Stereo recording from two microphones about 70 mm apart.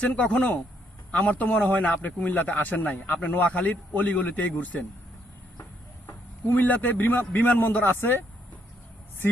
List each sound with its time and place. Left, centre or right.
0.0 s speech: left
6.5 s speech: left